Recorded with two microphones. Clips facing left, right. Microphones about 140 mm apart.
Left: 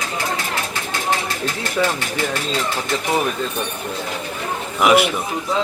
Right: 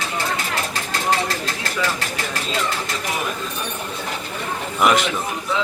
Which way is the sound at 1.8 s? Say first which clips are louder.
Left 5 dB; 50° left (ahead or behind).